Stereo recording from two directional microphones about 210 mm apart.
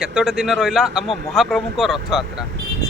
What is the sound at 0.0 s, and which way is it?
Speech, 5° right (ahead or behind).